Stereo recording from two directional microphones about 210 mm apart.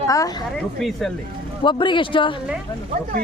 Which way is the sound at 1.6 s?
20° left (ahead or behind).